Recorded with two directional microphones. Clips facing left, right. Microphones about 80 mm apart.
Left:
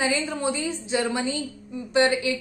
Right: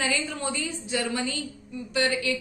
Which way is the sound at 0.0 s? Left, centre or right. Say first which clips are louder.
Left 4 dB; left.